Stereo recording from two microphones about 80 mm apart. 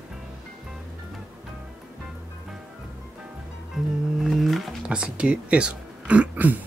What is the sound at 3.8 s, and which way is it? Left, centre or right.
Music, centre.